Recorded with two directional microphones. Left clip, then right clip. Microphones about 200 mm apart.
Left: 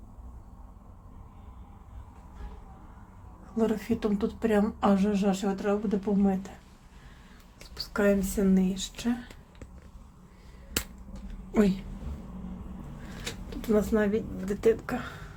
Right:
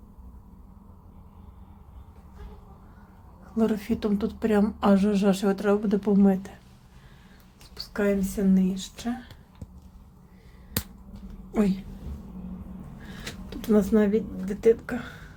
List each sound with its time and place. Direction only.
3.5 s speech: 15° right (ahead or behind)
7.8 s speech: centre (ahead or behind)
11.5 s a woman's voice: centre (ahead or behind)
13.5 s speech: 20° right (ahead or behind)
14.4 s speech: centre (ahead or behind)